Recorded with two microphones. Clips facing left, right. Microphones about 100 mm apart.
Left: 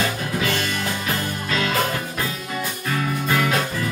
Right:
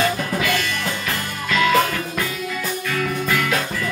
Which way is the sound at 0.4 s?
30° left (ahead or behind).